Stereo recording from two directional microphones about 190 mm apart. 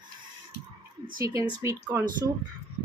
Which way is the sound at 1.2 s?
15° right (ahead or behind).